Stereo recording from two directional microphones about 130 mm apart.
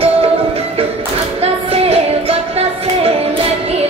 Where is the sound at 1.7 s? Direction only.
50° right (ahead or behind).